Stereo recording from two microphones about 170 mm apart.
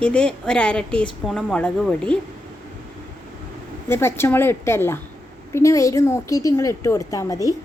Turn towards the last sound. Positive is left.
turn(degrees=20)  # may be behind; listen again after turning